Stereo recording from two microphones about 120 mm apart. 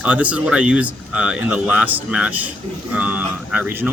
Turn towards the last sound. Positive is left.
turn(degrees=-15)  # may be behind; listen again after turning